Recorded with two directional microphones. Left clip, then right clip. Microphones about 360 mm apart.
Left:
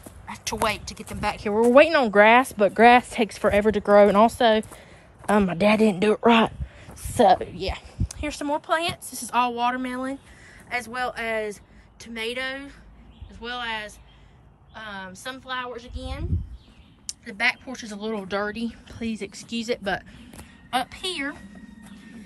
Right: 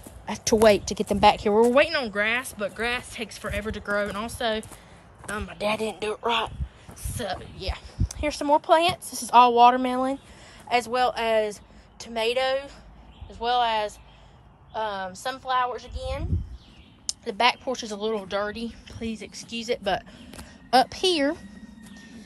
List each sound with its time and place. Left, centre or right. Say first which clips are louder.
0.3 s speech: right 7 dB; centre
1.6 s a woman's voice: left 9 dB; centre